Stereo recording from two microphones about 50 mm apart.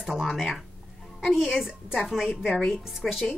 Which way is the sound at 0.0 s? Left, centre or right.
Centre.